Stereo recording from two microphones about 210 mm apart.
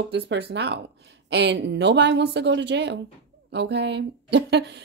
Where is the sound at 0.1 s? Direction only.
50° right (ahead or behind).